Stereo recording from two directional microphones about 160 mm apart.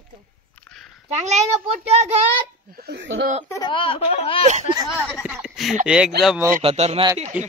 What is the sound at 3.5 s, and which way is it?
Speech, 25° left (ahead or behind).